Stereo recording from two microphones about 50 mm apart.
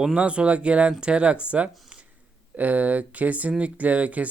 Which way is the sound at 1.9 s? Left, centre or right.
Right.